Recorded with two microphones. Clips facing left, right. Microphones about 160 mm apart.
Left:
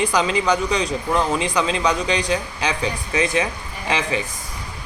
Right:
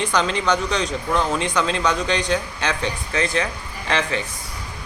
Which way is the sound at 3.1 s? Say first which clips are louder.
Left 2 dB; 15° left (ahead or behind).